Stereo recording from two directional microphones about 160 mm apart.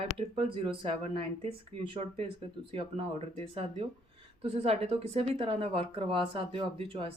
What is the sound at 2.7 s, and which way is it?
Speech, 40° right (ahead or behind).